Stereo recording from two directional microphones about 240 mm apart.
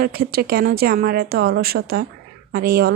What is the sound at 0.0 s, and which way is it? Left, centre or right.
A woman's voice, right.